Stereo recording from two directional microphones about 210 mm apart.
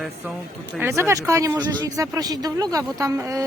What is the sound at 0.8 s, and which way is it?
Speech, 10° right (ahead or behind).